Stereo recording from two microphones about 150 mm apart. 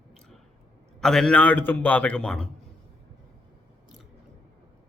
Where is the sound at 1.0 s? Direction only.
5° left (ahead or behind).